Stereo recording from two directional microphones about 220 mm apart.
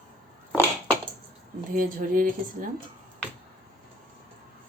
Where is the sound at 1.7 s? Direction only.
40° right (ahead or behind).